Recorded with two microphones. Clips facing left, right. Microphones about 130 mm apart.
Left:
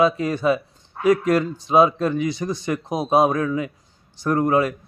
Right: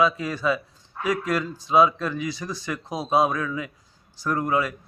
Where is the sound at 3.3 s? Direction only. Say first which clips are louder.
Left 6 dB; 40° left (ahead or behind).